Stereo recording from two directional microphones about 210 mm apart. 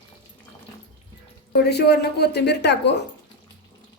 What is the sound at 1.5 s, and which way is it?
Speech, 50° left (ahead or behind).